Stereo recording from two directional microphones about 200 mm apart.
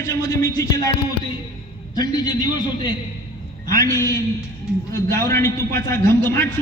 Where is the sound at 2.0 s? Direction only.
20° left (ahead or behind).